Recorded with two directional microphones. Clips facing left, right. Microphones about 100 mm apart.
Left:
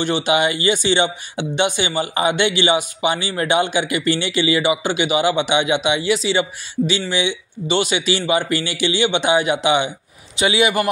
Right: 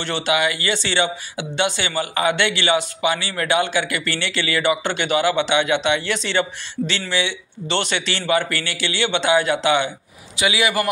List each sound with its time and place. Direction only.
0.0 s a man's voice: 15° left (ahead or behind)